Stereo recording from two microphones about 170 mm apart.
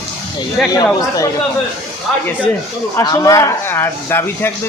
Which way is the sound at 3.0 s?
20° left (ahead or behind).